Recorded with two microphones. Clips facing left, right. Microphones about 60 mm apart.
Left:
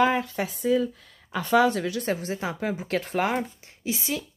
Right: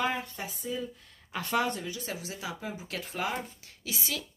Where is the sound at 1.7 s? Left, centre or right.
Left.